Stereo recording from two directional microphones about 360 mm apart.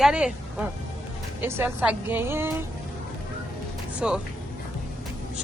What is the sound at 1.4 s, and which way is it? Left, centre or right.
A woman's voice, centre.